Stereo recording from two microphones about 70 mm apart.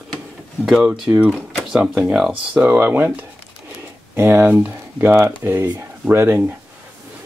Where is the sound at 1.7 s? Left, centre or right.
Centre.